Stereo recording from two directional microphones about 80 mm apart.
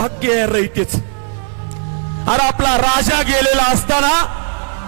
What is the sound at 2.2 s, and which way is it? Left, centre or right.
Speech, centre.